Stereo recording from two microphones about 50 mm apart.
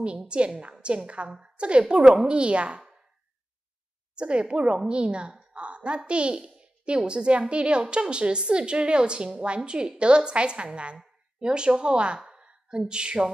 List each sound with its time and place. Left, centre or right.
0.0 s a woman's voice: right
4.1 s a woman's voice: right
12.3 s a sound: centre